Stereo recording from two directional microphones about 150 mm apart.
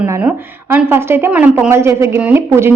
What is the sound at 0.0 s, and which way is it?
A woman's voice, 15° right (ahead or behind).